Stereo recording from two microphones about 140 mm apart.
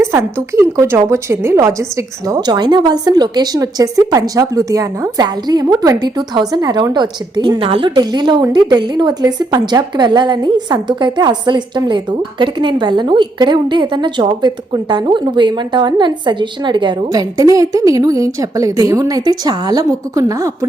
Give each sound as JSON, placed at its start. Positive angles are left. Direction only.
{"t": 0.0, "sound": "a woman's voice", "side_deg": -20}